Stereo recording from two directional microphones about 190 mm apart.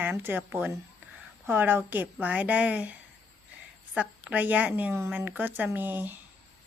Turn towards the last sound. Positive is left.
turn(degrees=-10)  # may be behind; listen again after turning